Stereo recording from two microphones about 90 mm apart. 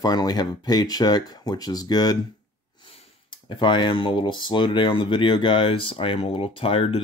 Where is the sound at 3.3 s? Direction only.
60° left (ahead or behind); by 7.0 s 90° left.